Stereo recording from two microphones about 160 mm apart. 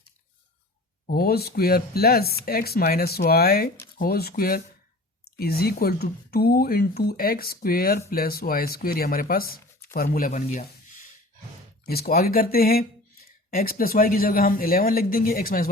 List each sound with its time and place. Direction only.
1.0 s speech: 70° left (ahead or behind); by 11.0 s 55° left (ahead or behind)
11.9 s speech: 70° left (ahead or behind)